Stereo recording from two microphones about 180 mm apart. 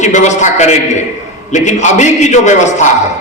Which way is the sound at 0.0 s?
40° left (ahead or behind).